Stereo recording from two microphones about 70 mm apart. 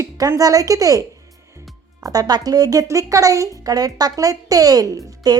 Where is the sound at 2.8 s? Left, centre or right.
Right.